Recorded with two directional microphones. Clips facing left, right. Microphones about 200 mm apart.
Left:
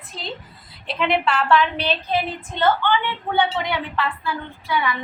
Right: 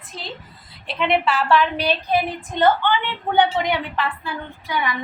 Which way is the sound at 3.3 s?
20° right (ahead or behind).